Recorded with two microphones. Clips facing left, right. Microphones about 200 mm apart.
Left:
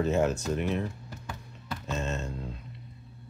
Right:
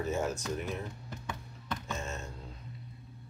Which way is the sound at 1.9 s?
70° left (ahead or behind).